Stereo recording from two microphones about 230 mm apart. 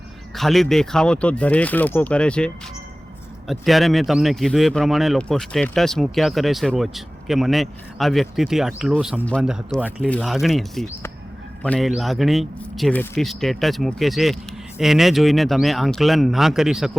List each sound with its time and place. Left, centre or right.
0.3 s speech: centre